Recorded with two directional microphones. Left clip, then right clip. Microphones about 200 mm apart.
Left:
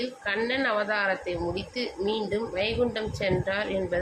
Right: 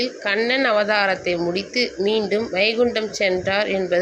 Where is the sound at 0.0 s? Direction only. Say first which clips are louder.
Right 8 dB; 20° right (ahead or behind).